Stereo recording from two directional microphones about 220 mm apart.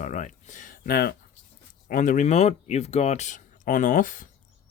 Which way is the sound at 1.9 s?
35° left (ahead or behind).